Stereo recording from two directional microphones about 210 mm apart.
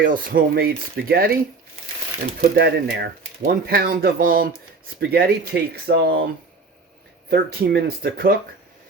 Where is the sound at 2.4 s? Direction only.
50° right (ahead or behind).